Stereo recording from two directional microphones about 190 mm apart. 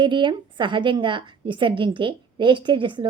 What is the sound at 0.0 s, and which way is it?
A woman's voice, 25° right (ahead or behind).